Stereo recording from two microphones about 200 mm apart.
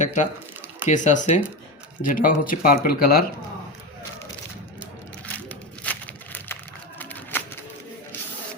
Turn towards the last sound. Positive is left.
turn(degrees=10)  # may be behind; listen again after turning